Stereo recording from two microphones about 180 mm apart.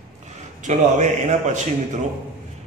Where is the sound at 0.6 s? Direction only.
40° right (ahead or behind).